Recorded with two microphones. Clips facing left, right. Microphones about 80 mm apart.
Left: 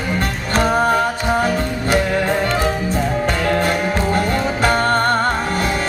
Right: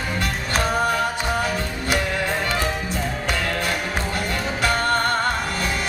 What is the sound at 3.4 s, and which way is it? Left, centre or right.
Music, left.